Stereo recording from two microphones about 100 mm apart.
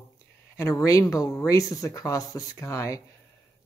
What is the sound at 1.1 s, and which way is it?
Speech, 35° left (ahead or behind).